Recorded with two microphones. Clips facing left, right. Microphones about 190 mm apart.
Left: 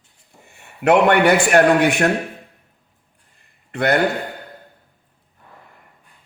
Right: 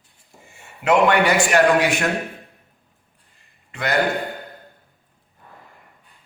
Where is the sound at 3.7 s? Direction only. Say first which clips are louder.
Left 6 dB; 60° left (ahead or behind).